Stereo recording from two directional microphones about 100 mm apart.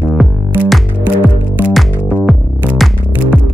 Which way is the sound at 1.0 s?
15° right (ahead or behind).